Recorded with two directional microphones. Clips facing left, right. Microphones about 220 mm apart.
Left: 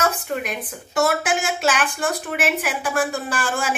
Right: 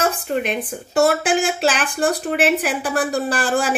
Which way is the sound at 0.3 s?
25° right (ahead or behind).